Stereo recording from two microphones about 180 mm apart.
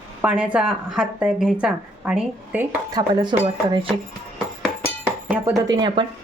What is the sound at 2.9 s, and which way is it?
Speech, 25° right (ahead or behind).